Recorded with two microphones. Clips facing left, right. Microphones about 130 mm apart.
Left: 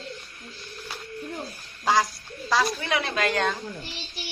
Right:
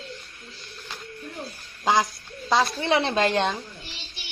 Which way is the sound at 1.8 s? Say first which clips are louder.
Right 1 dB; 20° right (ahead or behind).